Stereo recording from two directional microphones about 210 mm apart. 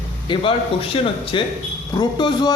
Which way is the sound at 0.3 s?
25° left (ahead or behind).